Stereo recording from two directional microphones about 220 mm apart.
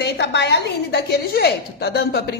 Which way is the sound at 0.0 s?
50° left (ahead or behind).